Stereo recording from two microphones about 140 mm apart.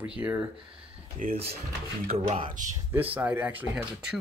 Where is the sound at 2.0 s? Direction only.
45° right (ahead or behind).